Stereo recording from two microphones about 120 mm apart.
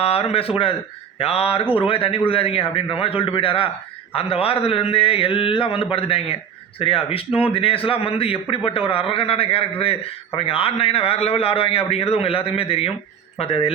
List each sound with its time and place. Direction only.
0.0 s a man's voice: 55° left (ahead or behind)
1.2 s mantra: 55° left (ahead or behind)
1.7 s a man's voice: 50° left (ahead or behind)
13.4 s mantra: 55° left (ahead or behind)